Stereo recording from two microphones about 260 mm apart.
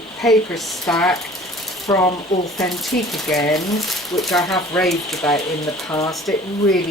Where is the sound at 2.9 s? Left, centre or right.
Left.